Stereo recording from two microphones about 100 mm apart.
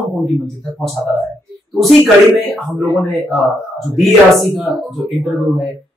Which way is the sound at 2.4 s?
Centre (ahead or behind).